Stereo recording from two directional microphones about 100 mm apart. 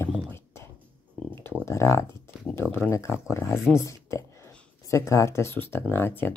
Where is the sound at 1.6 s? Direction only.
25° left (ahead or behind).